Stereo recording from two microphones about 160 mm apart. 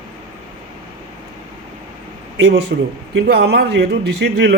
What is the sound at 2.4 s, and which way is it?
A man's voice, 90° right.